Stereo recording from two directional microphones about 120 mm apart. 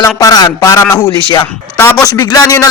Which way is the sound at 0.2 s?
30° left (ahead or behind).